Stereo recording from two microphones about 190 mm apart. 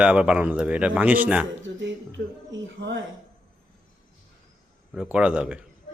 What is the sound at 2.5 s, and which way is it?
Speech, 70° right (ahead or behind).